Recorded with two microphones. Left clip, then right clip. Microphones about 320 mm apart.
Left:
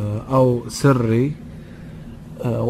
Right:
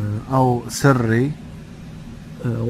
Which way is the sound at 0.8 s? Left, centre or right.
Centre.